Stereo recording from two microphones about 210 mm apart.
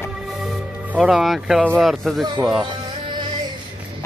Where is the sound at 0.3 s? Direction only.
Centre (ahead or behind).